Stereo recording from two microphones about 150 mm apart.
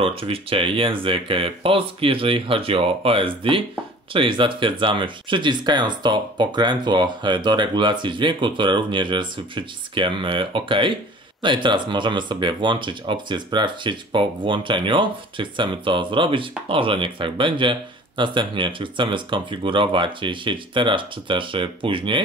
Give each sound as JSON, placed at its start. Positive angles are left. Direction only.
{"t": 0.0, "sound": "speech", "side_deg": -40}